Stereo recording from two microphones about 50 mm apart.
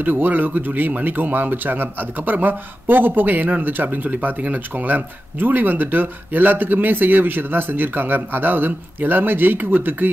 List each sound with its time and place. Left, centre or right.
0.0 s speech: right